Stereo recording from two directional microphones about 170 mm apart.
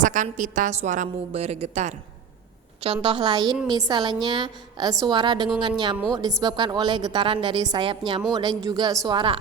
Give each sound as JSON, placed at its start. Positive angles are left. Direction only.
{"t": 0.0, "sound": "a woman's voice", "side_deg": -50}